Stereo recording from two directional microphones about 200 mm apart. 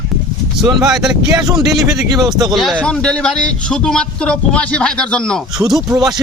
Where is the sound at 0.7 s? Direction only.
Centre (ahead or behind).